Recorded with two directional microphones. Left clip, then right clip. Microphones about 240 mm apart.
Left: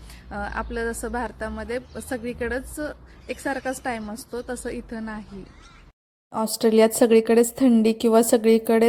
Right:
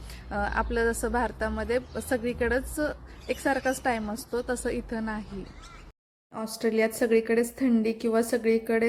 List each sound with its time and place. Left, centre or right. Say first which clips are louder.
0.3 s a woman's voice: right 1 dB; centre
6.3 s speech: left 8 dB; left